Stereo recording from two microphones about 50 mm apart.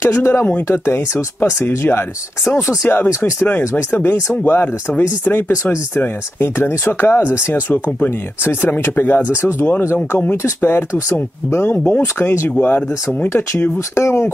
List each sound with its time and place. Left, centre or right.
0.0 s speech: left
2.8 s speech: left
8.5 s speech: left
10.3 s speech: left
12.2 s speech: left
12.4 s speech: left
13.3 s speech: left